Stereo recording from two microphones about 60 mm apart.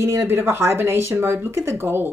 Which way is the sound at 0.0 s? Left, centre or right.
Right.